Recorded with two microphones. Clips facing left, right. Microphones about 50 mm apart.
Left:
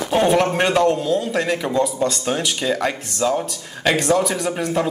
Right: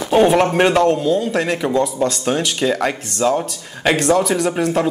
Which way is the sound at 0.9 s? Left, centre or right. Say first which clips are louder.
Right 3 dB; centre.